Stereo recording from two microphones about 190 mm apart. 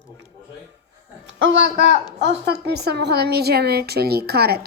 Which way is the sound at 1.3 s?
80° right.